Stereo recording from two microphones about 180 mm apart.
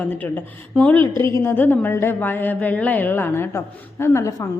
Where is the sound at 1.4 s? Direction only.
10° left (ahead or behind).